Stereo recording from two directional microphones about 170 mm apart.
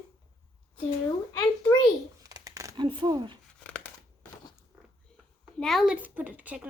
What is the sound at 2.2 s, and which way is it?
Crumpling, 20° right (ahead or behind).